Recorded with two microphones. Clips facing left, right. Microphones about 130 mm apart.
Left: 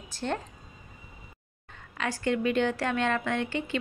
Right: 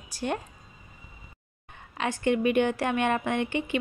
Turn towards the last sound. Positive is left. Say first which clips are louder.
# right 2 dB
turn(degrees=-15)  # may be behind; listen again after turning